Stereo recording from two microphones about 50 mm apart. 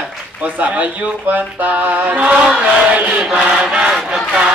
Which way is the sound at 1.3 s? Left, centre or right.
Right.